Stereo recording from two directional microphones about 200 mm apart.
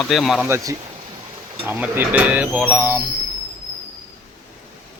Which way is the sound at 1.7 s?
10° right (ahead or behind).